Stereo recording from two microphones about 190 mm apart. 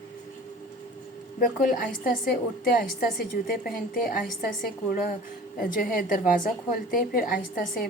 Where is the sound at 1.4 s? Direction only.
50° left (ahead or behind).